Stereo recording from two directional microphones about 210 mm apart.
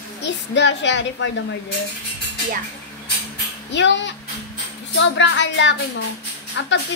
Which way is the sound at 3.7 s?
60° left (ahead or behind).